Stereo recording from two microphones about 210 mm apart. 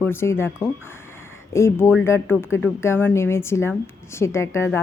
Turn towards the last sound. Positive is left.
turn(degrees=10)  # may be behind; listen again after turning